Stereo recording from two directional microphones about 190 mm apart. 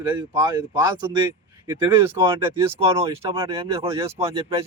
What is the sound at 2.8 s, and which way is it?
Speech, 30° right (ahead or behind).